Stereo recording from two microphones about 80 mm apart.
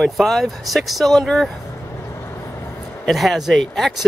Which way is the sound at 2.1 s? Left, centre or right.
Left.